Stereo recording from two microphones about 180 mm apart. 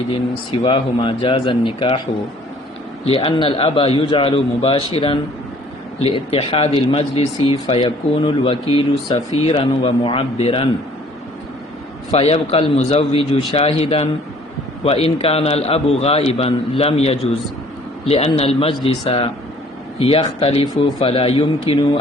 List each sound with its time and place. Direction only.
0.6 s a man's voice: 30° left (ahead or behind)
3.1 s a man's voice: 30° left (ahead or behind)
12.1 s a man's voice: 35° left (ahead or behind)